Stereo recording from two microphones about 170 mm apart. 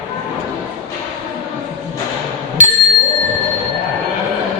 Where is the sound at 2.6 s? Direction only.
50° right (ahead or behind).